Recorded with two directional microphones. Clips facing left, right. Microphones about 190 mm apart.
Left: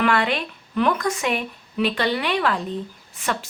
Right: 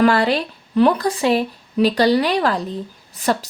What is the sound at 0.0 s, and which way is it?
A woman's voice, 35° right (ahead or behind).